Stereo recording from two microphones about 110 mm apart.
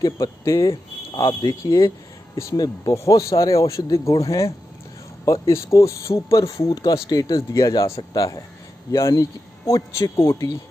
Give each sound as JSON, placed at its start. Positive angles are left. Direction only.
{"t": 0.0, "sound": "speech", "side_deg": 30}